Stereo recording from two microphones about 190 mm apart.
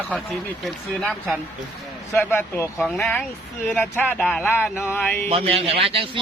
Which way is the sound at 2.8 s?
Centre (ahead or behind).